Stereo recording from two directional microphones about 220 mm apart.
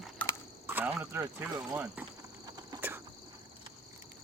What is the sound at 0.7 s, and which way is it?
Speech, 5° right (ahead or behind).